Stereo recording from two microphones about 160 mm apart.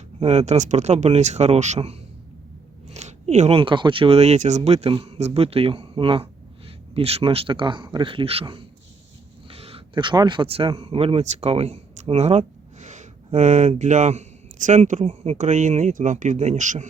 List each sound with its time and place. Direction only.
0.2 s speech: 45° right (ahead or behind)